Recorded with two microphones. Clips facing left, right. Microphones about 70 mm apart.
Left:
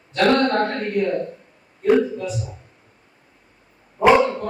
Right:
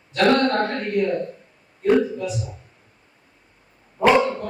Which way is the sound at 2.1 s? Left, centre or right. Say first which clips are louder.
Even; centre.